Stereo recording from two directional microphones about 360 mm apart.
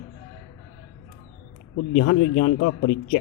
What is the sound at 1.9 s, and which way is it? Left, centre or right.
Speech, left.